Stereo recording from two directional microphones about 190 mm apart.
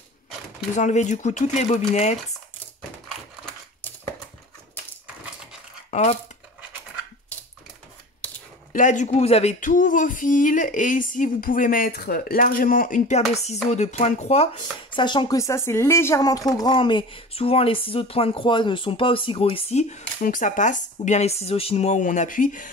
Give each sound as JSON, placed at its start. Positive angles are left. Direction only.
{"t": 0.7, "sound": "speech", "side_deg": 40}
{"t": 5.9, "sound": "a sound", "side_deg": 35}
{"t": 8.7, "sound": "speech", "side_deg": 40}